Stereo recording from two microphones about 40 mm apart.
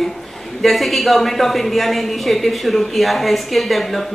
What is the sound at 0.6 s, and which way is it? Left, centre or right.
Speech, centre.